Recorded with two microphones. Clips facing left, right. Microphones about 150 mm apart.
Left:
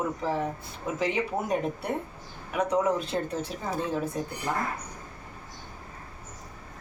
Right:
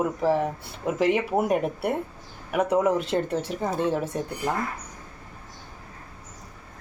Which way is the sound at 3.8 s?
85° right.